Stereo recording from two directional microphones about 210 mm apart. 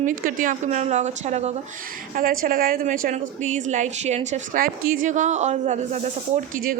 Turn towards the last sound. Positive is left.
turn(degrees=-40)  # may be behind; listen again after turning